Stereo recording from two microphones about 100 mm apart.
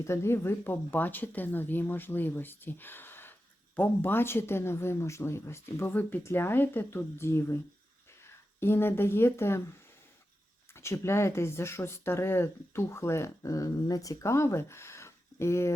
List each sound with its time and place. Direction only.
0.0 s speech: 25° left (ahead or behind)
8.6 s speech: 25° left (ahead or behind)
10.8 s speech: 25° left (ahead or behind)